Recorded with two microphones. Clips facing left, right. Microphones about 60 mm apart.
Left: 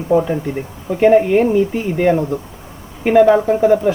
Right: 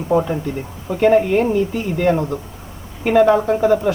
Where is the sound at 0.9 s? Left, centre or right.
Centre.